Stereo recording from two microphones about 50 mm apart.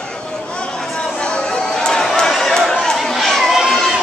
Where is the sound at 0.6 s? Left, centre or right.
Centre.